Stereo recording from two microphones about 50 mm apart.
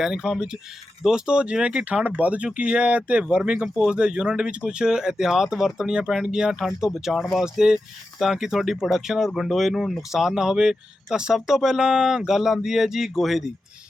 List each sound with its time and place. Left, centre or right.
0.0 s speech: centre